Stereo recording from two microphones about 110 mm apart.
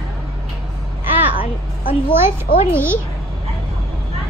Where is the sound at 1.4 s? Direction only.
55° left (ahead or behind).